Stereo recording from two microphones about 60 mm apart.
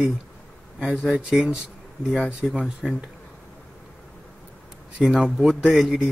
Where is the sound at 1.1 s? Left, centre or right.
Centre.